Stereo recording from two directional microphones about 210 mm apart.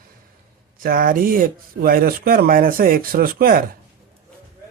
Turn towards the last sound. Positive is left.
turn(degrees=-45)  # may be behind; listen again after turning